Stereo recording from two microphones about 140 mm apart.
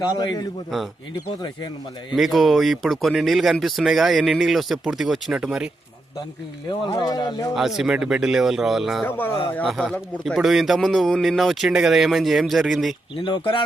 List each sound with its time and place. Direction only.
0.1 s speech: 30° left (ahead or behind)
2.1 s speech: centre (ahead or behind)
6.7 s speech: 30° left (ahead or behind)
7.5 s speech: 5° right (ahead or behind)
9.0 s speech: 15° left (ahead or behind)
9.6 s speech: centre (ahead or behind)
13.1 s speech: 35° left (ahead or behind)